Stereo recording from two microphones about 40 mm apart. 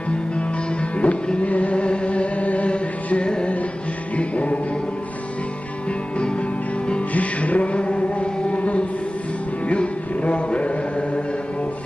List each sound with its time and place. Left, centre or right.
0.9 s music: left
6.1 s music: left
7.1 s music: left